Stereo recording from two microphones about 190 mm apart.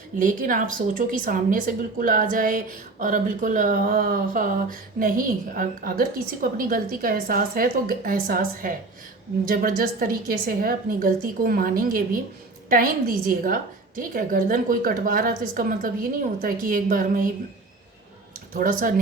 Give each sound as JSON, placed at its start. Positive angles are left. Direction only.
{"t": 0.2, "sound": "a woman's voice", "side_deg": -45}
{"t": 18.5, "sound": "a woman's voice", "side_deg": -45}